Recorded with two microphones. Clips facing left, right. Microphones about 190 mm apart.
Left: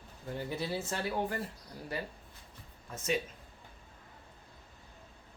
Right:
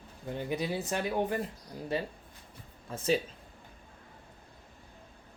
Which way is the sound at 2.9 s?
30° right (ahead or behind).